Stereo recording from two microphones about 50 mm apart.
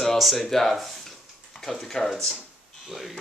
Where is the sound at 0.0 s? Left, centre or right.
Centre.